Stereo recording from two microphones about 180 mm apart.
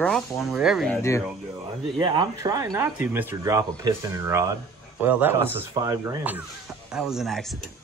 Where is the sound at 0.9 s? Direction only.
15° left (ahead or behind).